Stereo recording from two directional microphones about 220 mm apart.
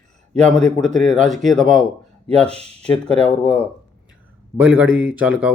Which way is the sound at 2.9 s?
5° left (ahead or behind).